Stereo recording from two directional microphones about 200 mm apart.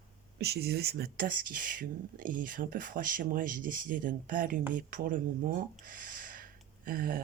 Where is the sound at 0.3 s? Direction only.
55° right (ahead or behind).